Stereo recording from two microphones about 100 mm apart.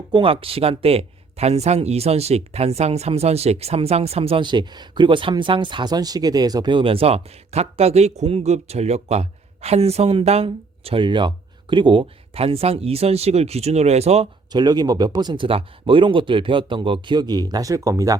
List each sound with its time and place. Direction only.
0.1 s speech: 60° right (ahead or behind); by 14.3 s 90° right
14.5 s speech: 45° right (ahead or behind)
15.4 s speech: 60° right (ahead or behind); by 18.2 s 35° right (ahead or behind)